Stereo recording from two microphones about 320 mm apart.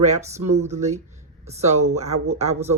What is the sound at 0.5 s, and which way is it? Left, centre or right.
Speech, right.